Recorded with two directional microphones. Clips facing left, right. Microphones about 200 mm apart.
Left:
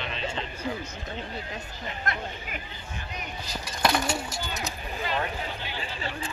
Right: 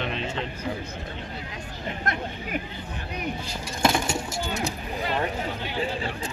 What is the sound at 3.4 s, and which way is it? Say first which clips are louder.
Speech: right 1 dB; 25° right (ahead or behind).